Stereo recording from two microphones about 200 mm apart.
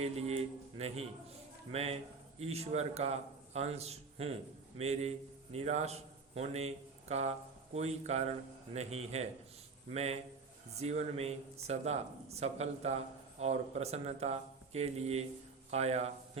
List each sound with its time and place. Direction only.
0.0 s a man's voice: 30° right (ahead or behind)